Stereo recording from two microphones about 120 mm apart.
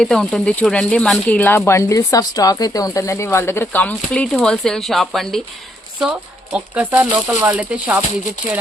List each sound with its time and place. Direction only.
0.0 s speech: 5° left (ahead or behind)
1.4 s speech: 20° left (ahead or behind); by 5.4 s 5° left (ahead or behind)
6.0 s speech: 10° right (ahead or behind)